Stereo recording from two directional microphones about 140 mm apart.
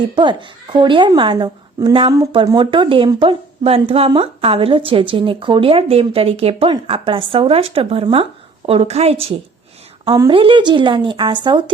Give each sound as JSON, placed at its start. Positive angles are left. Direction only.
{"t": 0.2, "sound": "a woman's voice", "side_deg": -35}